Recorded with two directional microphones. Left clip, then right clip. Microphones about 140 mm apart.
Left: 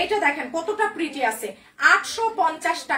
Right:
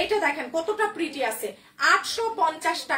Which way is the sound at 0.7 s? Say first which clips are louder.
Left 2 dB; 25° left (ahead or behind).